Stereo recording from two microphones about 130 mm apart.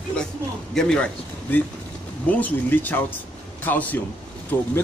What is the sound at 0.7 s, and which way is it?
A man's voice, 5° left (ahead or behind).